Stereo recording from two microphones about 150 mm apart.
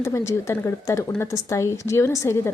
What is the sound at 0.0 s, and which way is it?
A woman's voice, 20° left (ahead or behind).